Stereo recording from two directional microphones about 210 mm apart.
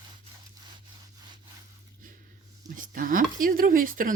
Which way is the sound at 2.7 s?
40° right (ahead or behind).